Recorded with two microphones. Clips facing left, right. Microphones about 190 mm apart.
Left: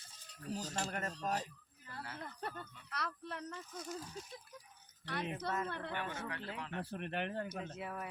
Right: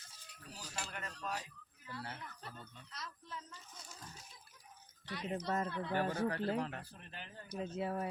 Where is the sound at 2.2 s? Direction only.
60° left (ahead or behind).